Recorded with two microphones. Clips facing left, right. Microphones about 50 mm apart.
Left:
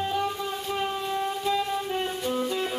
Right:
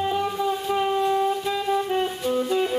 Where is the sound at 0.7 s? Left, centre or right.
Centre.